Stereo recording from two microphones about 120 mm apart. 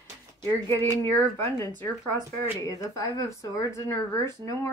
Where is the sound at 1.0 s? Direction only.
20° left (ahead or behind).